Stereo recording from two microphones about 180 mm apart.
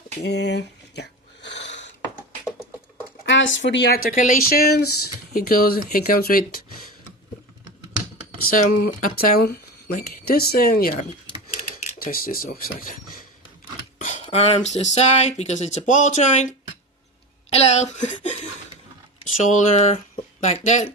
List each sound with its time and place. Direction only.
0.2 s a sound: 70° left (ahead or behind)
3.2 s speech: 90° left; by 6.8 s 55° left (ahead or behind)
8.4 s speech: 50° left (ahead or behind)
11.9 s speech: 55° left (ahead or behind)
14.0 s a sound: 40° left (ahead or behind)
14.3 s speech: 35° left (ahead or behind)
19.5 s speech: 40° left (ahead or behind)